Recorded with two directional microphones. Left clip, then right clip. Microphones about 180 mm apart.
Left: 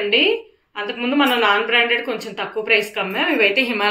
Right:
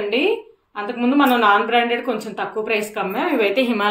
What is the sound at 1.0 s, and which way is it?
A woman's voice, 50° right (ahead or behind).